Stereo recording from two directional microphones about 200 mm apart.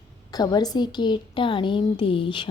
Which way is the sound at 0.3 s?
20° left (ahead or behind).